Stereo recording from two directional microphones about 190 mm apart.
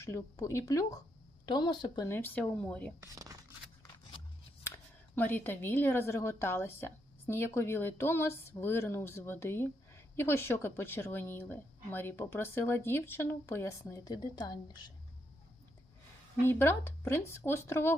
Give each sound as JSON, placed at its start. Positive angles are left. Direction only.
{"t": 0.0, "sound": "a woman's voice", "side_deg": 15}
{"t": 2.0, "sound": "a woman's voice", "side_deg": 10}
{"t": 3.0, "sound": "speech", "side_deg": -20}
{"t": 5.1, "sound": "a woman's voice", "side_deg": 10}
{"t": 16.4, "sound": "a woman's voice", "side_deg": 10}